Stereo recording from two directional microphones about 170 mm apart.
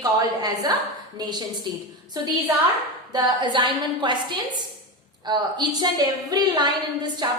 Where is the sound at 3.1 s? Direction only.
25° right (ahead or behind).